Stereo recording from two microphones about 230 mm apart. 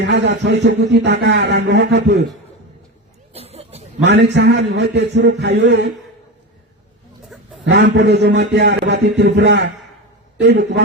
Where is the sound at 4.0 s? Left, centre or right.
Right.